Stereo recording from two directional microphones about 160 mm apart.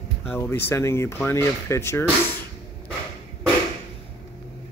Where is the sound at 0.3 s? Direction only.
15° left (ahead or behind).